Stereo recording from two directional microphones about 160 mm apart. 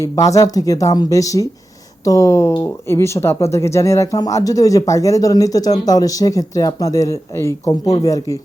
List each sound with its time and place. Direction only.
0.0 s speech: 20° left (ahead or behind)